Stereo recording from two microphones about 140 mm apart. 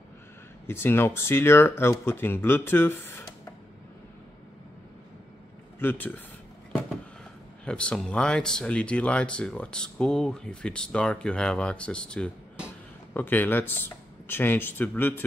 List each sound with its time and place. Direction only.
0.7 s speech: 15° left (ahead or behind)
5.8 s speech: 15° left (ahead or behind)
7.6 s speech: 5° left (ahead or behind)